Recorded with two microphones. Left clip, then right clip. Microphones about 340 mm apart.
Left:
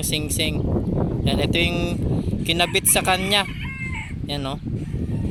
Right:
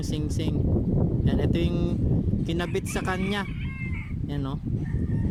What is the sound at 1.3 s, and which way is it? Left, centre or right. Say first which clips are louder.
Speech: left 8 dB; centre.